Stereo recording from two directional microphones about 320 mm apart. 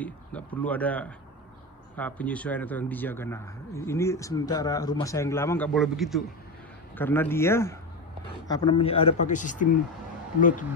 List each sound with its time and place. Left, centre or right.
0.6 s speech: centre; by 9.7 s left